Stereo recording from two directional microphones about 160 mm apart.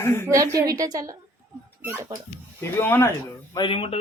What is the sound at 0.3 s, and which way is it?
A woman's voice, 20° right (ahead or behind).